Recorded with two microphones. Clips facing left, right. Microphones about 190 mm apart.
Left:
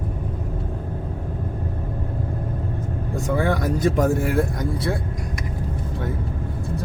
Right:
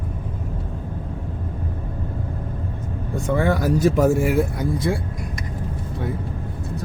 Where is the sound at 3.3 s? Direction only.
Centre (ahead or behind).